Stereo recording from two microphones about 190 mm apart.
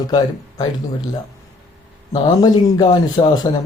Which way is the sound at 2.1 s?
20° left (ahead or behind).